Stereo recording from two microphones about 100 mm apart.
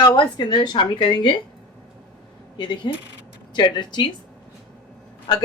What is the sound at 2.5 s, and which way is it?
Speech, 50° left (ahead or behind).